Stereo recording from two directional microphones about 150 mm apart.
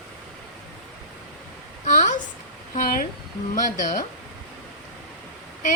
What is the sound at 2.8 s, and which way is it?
A woman's voice, 65° left (ahead or behind).